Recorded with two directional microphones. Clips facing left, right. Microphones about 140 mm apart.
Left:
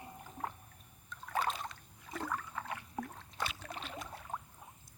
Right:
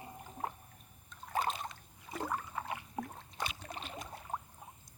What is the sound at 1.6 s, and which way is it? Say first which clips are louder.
Rowboat: right 1 dB; 15° right (ahead or behind).